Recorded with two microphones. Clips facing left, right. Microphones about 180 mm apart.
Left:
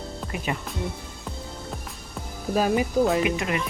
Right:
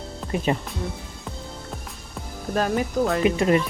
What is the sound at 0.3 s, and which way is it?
Speech, 35° right (ahead or behind).